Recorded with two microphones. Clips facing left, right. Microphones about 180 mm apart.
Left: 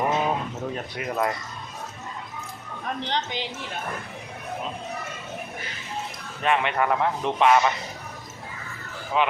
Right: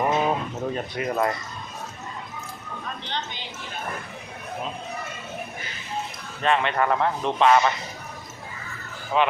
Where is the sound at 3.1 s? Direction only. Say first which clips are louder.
Left 4 dB; 90° left.